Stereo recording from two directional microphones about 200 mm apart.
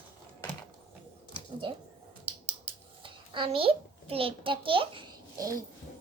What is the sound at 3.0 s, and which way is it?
A child's voice, 25° right (ahead or behind).